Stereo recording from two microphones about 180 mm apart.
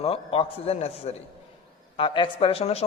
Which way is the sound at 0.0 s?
35° left (ahead or behind).